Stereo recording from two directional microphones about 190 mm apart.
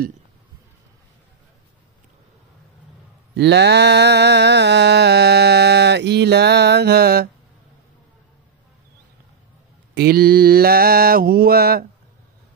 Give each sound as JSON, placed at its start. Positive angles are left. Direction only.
{"t": 3.3, "sound": "mantra", "side_deg": -65}
{"t": 9.9, "sound": "mantra", "side_deg": -55}